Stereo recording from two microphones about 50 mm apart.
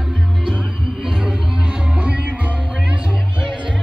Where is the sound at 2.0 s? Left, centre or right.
Right.